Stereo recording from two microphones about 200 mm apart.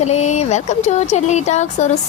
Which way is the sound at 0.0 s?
35° left (ahead or behind).